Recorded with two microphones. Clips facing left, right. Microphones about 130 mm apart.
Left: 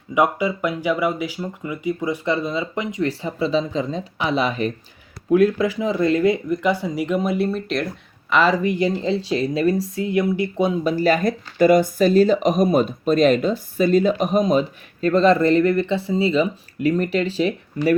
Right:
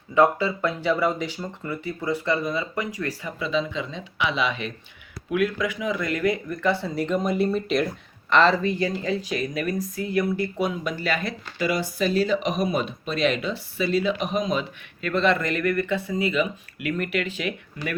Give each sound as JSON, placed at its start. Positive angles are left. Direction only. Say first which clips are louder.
{"t": 0.1, "sound": "speech", "louder": "even", "side_deg": 15}
{"t": 8.9, "sound": "speech", "louder": "left 5 dB", "side_deg": 25}